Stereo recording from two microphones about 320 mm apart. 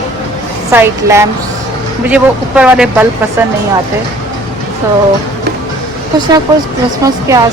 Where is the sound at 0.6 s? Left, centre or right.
Centre.